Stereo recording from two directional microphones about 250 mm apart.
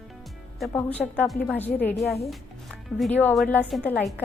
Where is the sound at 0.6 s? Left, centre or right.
Centre.